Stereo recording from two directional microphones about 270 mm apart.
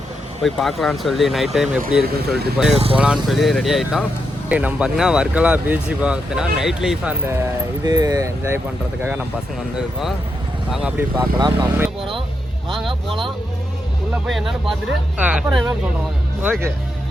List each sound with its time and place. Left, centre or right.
0.4 s speech: centre
2.7 s speech: right
3.2 s speech: centre
9.7 s speech: centre
14.3 s speech: centre